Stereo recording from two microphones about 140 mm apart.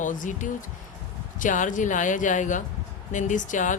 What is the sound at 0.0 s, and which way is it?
Speech, 65° left (ahead or behind).